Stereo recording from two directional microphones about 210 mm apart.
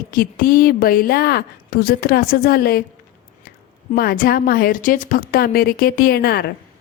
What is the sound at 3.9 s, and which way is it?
A woman's voice, 45° left (ahead or behind).